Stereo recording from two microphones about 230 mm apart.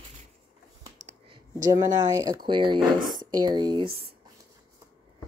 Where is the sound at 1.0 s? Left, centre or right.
Right.